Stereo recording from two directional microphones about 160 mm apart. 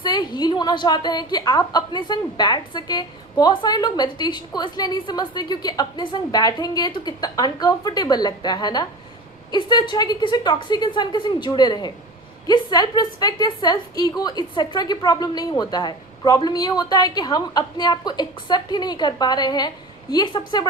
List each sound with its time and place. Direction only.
0.0 s a woman's voice: 30° left (ahead or behind)